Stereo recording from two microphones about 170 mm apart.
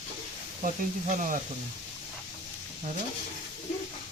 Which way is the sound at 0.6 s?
50° right (ahead or behind).